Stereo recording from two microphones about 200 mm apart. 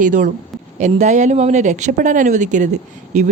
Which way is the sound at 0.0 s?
40° right (ahead or behind).